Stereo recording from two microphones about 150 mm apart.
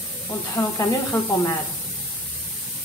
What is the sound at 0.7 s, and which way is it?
Speech, 20° left (ahead or behind).